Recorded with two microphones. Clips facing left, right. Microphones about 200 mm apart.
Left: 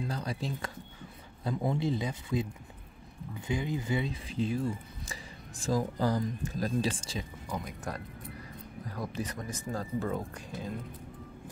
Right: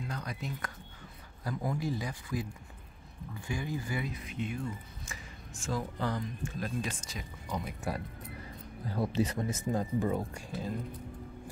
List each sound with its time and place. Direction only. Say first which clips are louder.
0.0 s speech: left 4 dB; 30° left (ahead or behind)
7.6 s speech: right 2 dB; 10° right (ahead or behind)
8.8 s speech: right 6 dB; 30° right (ahead or behind)
9.7 s speech: right 2 dB; 15° right (ahead or behind)